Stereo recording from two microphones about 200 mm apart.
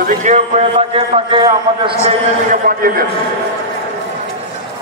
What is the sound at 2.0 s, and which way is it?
A man's voice, 40° right (ahead or behind).